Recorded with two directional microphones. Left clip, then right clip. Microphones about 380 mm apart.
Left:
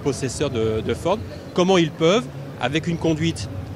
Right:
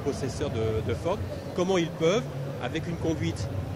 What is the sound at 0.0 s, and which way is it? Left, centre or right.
A man's voice, left.